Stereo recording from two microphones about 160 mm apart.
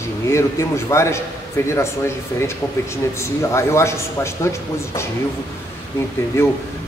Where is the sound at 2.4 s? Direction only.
15° left (ahead or behind).